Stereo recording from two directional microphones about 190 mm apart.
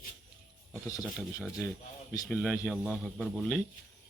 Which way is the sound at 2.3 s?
5° left (ahead or behind).